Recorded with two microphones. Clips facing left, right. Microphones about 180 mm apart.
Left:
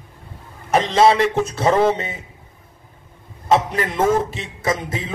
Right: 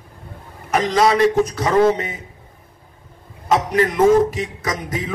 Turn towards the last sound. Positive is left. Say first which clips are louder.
# left 2 dB
turn(degrees=25)  # may be behind; listen again after turning